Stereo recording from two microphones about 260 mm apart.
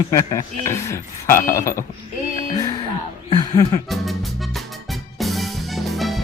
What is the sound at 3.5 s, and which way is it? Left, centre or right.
Speech, centre.